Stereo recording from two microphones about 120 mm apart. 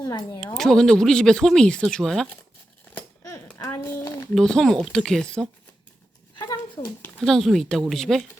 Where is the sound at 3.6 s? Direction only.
20° left (ahead or behind).